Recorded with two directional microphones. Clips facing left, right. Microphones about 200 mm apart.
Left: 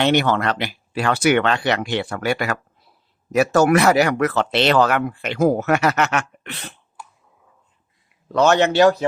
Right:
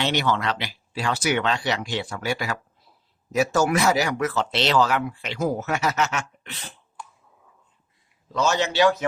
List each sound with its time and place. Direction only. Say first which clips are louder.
0.0 s speech: left 6 dB; 55° left (ahead or behind)
7.0 s clicking: even; 5° left (ahead or behind)
8.3 s speech: left 7 dB; 65° left (ahead or behind)